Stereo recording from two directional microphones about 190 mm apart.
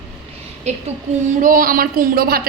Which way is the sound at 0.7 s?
35° right (ahead or behind).